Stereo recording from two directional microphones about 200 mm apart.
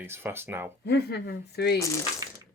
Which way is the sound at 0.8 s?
55° left (ahead or behind).